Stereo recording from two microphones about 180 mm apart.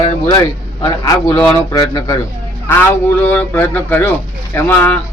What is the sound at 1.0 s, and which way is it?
A man's voice, 15° left (ahead or behind).